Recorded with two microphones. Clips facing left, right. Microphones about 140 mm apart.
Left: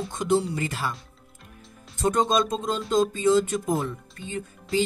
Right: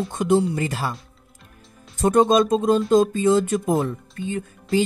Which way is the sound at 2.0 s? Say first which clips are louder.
Right 6 dB; 55° right (ahead or behind).